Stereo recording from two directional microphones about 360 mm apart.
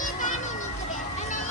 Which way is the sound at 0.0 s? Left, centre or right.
Left.